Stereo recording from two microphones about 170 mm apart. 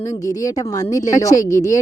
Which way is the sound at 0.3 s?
20° left (ahead or behind).